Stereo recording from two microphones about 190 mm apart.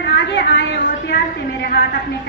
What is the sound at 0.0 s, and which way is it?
Speech, 55° left (ahead or behind).